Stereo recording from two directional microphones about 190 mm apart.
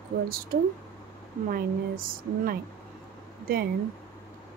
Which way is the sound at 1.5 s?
50° right (ahead or behind).